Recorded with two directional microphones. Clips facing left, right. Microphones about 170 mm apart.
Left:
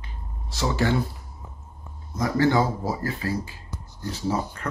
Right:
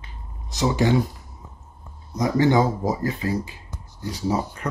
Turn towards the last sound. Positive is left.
turn(degrees=-15)  # may be behind; listen again after turning